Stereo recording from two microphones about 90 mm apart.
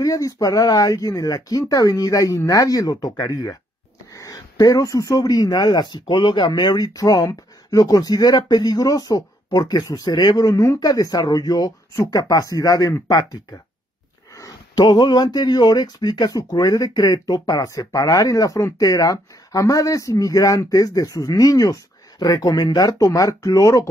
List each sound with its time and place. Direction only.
0.0 s speech: 40° left (ahead or behind)
14.8 s speech: 55° left (ahead or behind); by 23.9 s 35° left (ahead or behind)